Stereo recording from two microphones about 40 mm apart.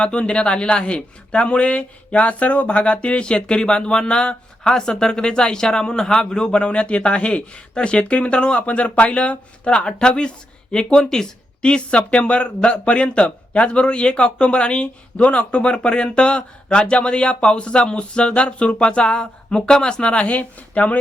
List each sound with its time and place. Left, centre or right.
0.0 s speech: left
4.7 s speech: centre
11.6 s speech: left